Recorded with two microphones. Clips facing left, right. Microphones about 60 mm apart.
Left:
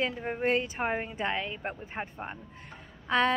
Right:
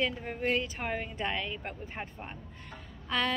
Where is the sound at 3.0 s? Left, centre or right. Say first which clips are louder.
Left 5 dB; left.